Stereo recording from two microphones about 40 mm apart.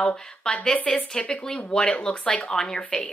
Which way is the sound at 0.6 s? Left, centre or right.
Left.